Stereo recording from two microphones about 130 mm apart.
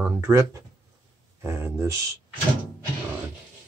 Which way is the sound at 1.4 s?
20° right (ahead or behind).